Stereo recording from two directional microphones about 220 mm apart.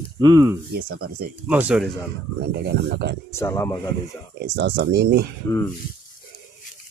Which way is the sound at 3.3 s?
10° left (ahead or behind).